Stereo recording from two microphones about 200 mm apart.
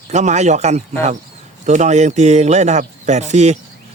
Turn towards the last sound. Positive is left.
turn(degrees=-35)  # may be behind; listen again after turning